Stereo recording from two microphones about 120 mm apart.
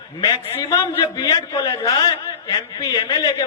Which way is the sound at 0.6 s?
30° left (ahead or behind).